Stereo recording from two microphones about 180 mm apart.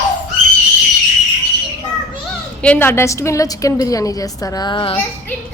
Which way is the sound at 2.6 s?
10° left (ahead or behind).